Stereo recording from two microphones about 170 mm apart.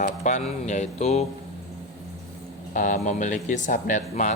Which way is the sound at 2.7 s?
45° left (ahead or behind).